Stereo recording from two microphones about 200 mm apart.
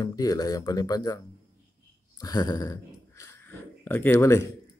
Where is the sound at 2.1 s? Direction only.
20° left (ahead or behind).